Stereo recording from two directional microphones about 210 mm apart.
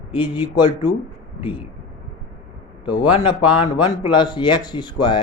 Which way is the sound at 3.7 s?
20° left (ahead or behind).